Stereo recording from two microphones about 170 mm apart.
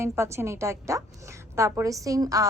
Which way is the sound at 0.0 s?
15° right (ahead or behind).